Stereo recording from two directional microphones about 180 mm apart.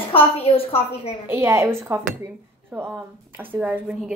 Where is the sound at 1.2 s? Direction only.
15° right (ahead or behind).